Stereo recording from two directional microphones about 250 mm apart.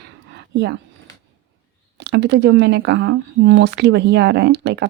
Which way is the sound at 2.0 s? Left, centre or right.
Right.